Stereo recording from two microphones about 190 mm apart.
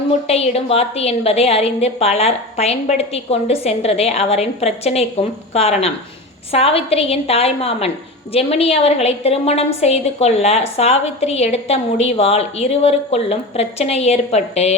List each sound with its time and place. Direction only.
0.3 s a woman's voice: 30° left (ahead or behind)